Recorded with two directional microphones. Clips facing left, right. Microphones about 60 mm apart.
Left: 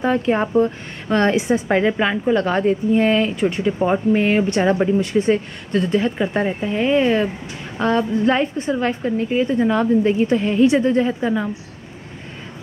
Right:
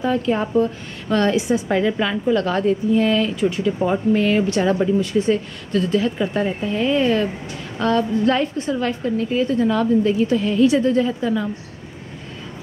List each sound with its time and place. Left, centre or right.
0.0 s a woman's voice: left